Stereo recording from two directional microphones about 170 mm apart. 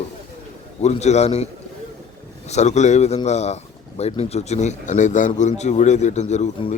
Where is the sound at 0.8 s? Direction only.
40° left (ahead or behind).